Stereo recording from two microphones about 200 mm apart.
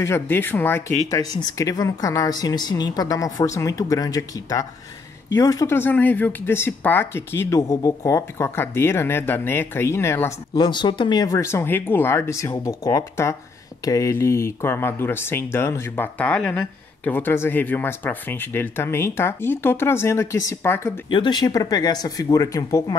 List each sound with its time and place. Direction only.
0.0 s speech: 10° left (ahead or behind)